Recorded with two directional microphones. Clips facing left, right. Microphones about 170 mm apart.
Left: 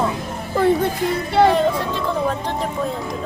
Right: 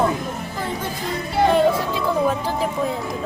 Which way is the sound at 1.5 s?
5° right (ahead or behind).